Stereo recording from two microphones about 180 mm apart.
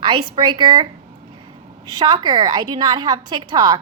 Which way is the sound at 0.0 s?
25° right (ahead or behind).